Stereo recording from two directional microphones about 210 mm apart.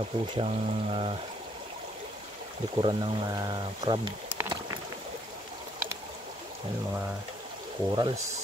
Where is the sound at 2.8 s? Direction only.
20° right (ahead or behind).